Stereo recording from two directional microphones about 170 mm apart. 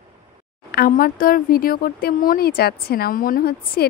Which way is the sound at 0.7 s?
60° left (ahead or behind).